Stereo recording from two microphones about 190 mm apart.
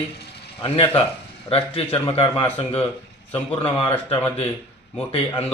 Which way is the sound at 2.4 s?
10° left (ahead or behind).